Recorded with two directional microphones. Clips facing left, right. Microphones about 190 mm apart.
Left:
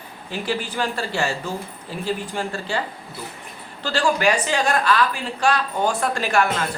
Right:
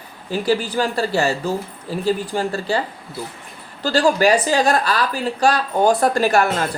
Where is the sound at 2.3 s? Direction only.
40° right (ahead or behind).